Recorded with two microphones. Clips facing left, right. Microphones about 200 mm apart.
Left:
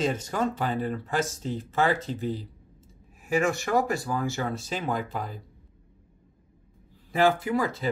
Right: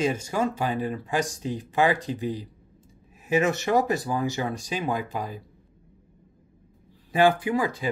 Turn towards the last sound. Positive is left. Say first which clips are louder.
# right 1 dB
turn(degrees=-15)  # may be behind; listen again after turning